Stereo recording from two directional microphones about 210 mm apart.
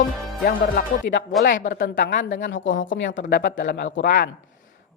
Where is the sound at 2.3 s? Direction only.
55° left (ahead or behind).